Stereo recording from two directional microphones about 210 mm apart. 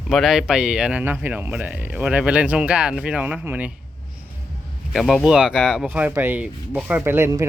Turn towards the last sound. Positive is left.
turn(degrees=-10)  # may be behind; listen again after turning